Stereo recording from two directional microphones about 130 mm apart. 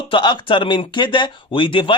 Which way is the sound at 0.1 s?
35° left (ahead or behind).